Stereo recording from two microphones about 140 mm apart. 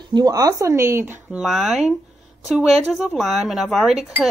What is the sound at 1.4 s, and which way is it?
A woman's voice, 5° right (ahead or behind).